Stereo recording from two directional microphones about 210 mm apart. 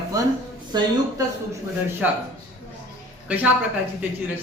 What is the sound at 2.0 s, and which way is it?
Speech, 5° right (ahead or behind).